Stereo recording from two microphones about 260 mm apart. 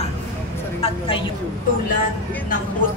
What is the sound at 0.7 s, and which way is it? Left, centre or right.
Speech, left.